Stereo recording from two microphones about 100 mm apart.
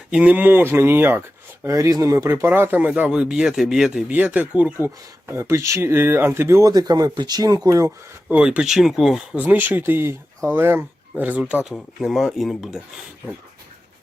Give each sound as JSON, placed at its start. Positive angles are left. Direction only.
{"t": 0.1, "sound": "speech", "side_deg": -10}
{"t": 1.6, "sound": "speech", "side_deg": -30}
{"t": 5.3, "sound": "speech", "side_deg": -25}
{"t": 7.9, "sound": "speech", "side_deg": -15}
{"t": 9.3, "sound": "speech", "side_deg": -15}
{"t": 11.7, "sound": "speech", "side_deg": 0}